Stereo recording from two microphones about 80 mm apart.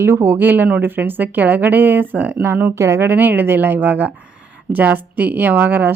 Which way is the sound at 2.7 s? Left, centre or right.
Right.